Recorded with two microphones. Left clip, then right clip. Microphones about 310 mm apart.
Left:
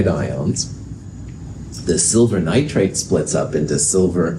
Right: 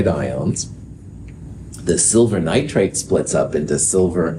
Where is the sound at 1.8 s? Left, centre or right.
Right.